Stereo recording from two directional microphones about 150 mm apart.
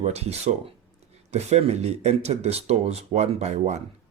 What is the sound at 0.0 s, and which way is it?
Speech, 45° right (ahead or behind).